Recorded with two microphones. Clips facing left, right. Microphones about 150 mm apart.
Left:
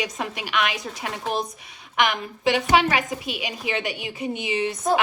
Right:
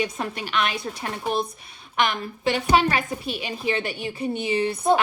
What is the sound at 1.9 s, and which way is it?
A woman's voice, 15° left (ahead or behind).